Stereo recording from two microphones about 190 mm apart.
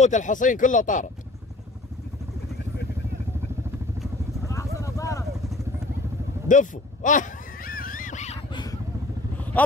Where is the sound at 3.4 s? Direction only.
15° right (ahead or behind).